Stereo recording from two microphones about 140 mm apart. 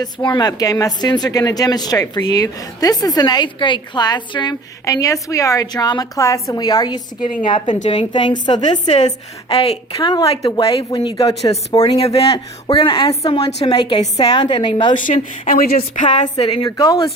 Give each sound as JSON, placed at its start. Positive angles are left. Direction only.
{"t": 0.0, "sound": "a woman's voice", "side_deg": 30}
{"t": 8.9, "sound": "a woman's voice", "side_deg": 50}
{"t": 10.4, "sound": "a woman's voice", "side_deg": 25}
{"t": 14.9, "sound": "speech", "side_deg": 70}
{"t": 16.3, "sound": "speech", "side_deg": 30}